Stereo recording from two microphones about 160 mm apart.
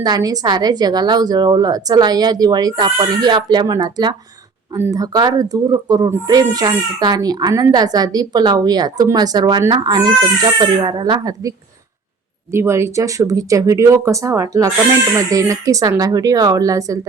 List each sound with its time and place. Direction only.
0.0 s speech: 25° right (ahead or behind)